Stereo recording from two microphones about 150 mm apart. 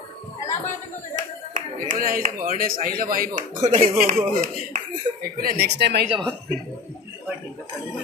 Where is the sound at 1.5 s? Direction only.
65° right (ahead or behind).